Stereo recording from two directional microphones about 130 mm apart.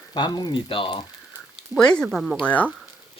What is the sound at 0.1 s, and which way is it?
Speech, 35° left (ahead or behind).